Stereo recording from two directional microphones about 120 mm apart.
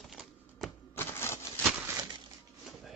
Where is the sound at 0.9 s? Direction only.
20° left (ahead or behind).